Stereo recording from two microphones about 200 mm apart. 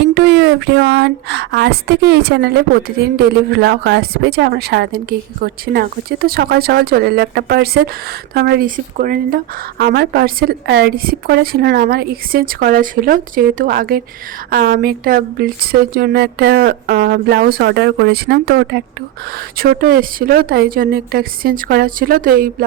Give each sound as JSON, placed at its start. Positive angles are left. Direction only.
{"t": 0.0, "sound": "speech", "side_deg": -55}